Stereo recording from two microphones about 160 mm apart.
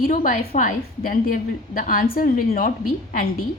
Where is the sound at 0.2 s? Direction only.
50° left (ahead or behind).